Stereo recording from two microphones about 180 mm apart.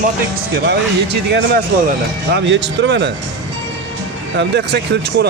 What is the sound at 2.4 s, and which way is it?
Speech, 85° right.